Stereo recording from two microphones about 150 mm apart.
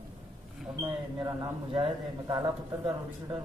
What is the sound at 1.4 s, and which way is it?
A man's voice, 30° right (ahead or behind).